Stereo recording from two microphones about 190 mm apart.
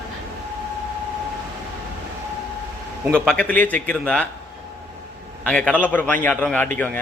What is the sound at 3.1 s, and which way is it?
A man's voice, 5° left (ahead or behind).